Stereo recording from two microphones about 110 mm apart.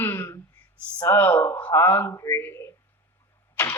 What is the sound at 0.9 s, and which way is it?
Speech, 20° left (ahead or behind).